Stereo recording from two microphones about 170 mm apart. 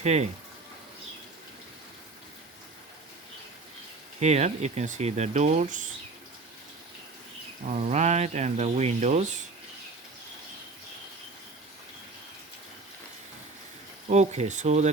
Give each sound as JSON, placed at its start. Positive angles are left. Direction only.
{"t": 0.0, "sound": "speech", "side_deg": -40}
{"t": 4.2, "sound": "speech", "side_deg": -40}
{"t": 7.6, "sound": "speech", "side_deg": -40}
{"t": 14.1, "sound": "speech", "side_deg": -40}